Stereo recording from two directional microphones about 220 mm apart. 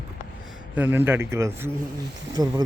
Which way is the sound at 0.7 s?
10° right (ahead or behind).